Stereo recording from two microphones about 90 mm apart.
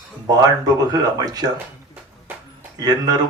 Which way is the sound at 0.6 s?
45° right (ahead or behind).